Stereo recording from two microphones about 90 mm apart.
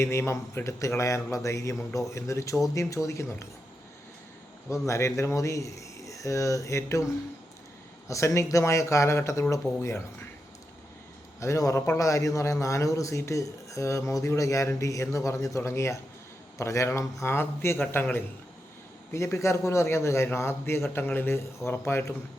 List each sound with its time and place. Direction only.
0.0 s speech: 30° left (ahead or behind)
4.7 s speech: 35° left (ahead or behind)
11.3 s a man's voice: 35° left (ahead or behind)
19.1 s a man's voice: 35° left (ahead or behind)